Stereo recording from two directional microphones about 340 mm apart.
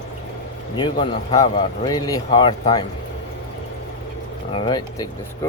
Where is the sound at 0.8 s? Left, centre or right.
Centre.